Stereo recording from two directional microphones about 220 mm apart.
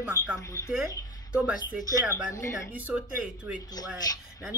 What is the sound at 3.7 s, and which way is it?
Speech, 15° left (ahead or behind).